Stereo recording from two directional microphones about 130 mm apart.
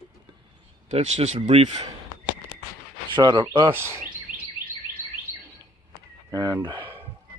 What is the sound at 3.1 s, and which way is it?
Speech, 35° right (ahead or behind).